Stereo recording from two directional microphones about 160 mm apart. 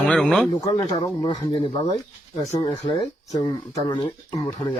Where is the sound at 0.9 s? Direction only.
25° left (ahead or behind).